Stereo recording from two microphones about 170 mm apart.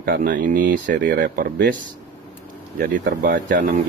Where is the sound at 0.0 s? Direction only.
60° right (ahead or behind).